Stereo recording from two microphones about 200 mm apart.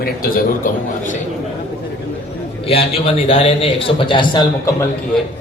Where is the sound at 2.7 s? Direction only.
30° left (ahead or behind).